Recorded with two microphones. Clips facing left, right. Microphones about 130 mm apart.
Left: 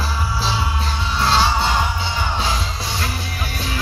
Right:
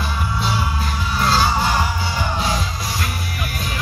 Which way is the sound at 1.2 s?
30° left (ahead or behind).